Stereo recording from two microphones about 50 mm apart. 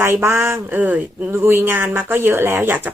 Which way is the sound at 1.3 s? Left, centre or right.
Right.